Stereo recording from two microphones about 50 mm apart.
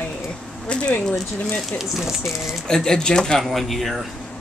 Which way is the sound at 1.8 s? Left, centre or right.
Centre.